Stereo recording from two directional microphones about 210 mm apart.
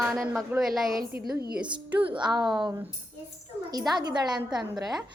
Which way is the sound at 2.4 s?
Centre (ahead or behind).